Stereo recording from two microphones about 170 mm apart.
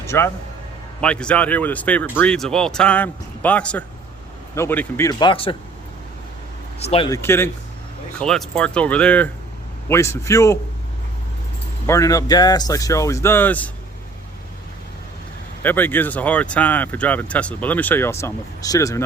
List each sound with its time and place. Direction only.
0.0 s speech: 15° left (ahead or behind)
5.2 s speech: 30° left (ahead or behind)
6.7 s speech: 35° left (ahead or behind)
7.1 s speech: 15° left (ahead or behind)
8.2 s speech: 5° left (ahead or behind)
11.9 s speech: 20° left (ahead or behind)
15.6 s speech: 10° left (ahead or behind)